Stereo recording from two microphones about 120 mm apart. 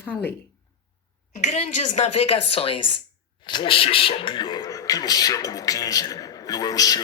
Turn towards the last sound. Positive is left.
turn(degrees=30)  # may be behind; listen again after turning